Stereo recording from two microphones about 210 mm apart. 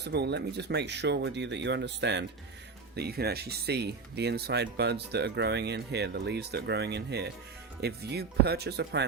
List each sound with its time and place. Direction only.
0.0 s speech: 50° right (ahead or behind)